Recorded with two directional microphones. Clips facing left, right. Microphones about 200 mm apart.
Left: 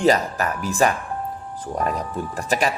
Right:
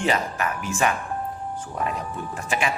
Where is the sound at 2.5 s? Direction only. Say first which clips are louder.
Left 4 dB; 40° left (ahead or behind).